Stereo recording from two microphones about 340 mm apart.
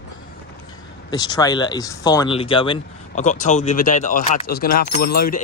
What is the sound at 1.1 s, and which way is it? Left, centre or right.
Speech, centre.